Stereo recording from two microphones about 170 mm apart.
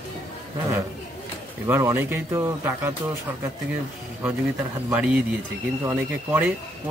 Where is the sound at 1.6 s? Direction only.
15° right (ahead or behind).